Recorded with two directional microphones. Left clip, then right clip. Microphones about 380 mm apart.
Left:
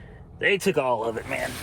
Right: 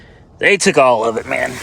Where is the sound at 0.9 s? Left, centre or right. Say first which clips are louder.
Right 11 dB; right.